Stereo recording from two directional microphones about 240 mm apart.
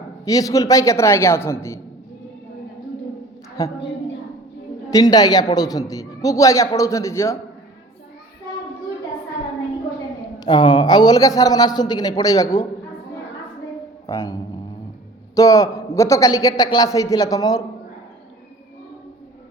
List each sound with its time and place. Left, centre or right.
0.3 s a man's voice: centre
3.6 s a man's voice: centre
4.9 s a man's voice: centre
10.4 s a man's voice: centre
14.1 s a man's voice: centre
15.4 s a man's voice: centre